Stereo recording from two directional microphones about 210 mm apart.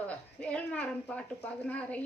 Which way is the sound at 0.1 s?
5° left (ahead or behind).